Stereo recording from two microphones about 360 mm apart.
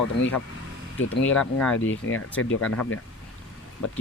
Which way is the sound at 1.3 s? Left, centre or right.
Centre.